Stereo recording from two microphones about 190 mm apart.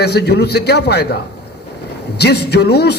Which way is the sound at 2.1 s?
60° left (ahead or behind).